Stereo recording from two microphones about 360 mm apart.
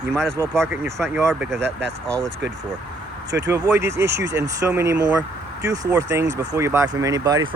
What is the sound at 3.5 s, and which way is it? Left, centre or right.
Speech, centre.